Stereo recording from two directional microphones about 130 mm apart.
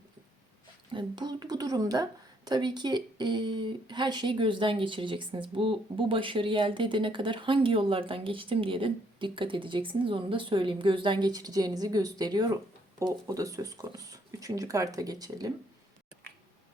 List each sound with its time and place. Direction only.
0.9 s speech: 35° right (ahead or behind)